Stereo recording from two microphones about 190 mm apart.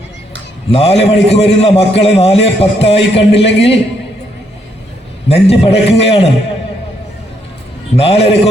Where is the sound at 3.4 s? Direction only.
65° left (ahead or behind).